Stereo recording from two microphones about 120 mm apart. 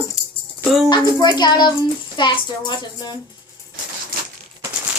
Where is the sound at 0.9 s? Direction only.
35° left (ahead or behind).